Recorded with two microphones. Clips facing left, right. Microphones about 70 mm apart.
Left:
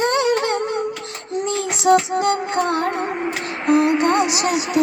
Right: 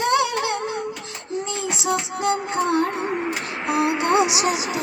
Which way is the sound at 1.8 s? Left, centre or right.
Left.